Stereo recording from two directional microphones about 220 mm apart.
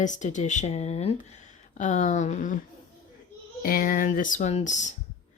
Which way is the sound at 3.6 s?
40° left (ahead or behind).